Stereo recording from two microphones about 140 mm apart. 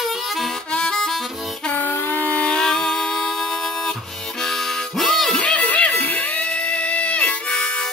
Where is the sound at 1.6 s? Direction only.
10° left (ahead or behind).